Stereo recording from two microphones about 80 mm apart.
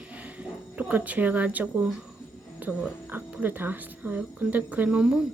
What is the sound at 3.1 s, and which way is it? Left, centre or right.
A woman's voice, right.